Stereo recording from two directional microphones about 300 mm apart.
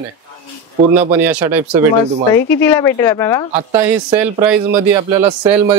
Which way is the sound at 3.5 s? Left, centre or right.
Centre.